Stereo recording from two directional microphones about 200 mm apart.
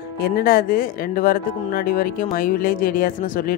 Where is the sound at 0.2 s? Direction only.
45° left (ahead or behind).